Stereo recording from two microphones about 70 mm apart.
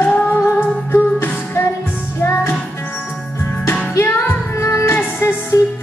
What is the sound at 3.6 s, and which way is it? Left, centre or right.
Music, left.